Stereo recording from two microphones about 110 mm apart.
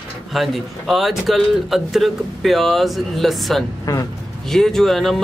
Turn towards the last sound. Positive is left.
turn(degrees=0)  # may be behind; listen again after turning